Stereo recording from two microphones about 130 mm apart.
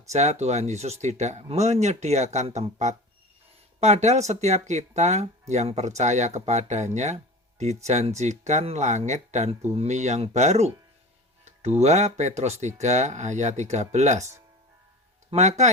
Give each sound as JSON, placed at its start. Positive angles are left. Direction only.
{"t": 0.1, "sound": "speech", "side_deg": -60}